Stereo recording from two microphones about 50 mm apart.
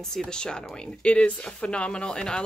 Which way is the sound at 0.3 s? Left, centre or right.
Centre.